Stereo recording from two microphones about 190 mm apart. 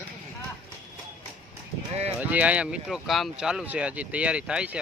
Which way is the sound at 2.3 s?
5° right (ahead or behind).